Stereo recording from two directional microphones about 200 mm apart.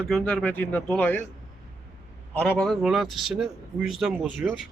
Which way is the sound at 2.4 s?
Centre (ahead or behind).